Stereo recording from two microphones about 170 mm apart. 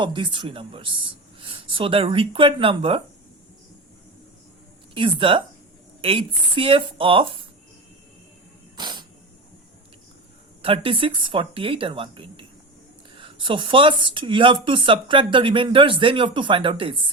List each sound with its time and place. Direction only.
0.0 s speech: 30° right (ahead or behind)
4.9 s speech: 30° right (ahead or behind)
8.7 s a sound: 25° right (ahead or behind)
10.6 s speech: 30° right (ahead or behind)